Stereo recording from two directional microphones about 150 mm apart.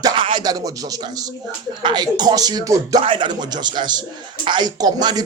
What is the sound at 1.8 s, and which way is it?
Speech, 30° right (ahead or behind).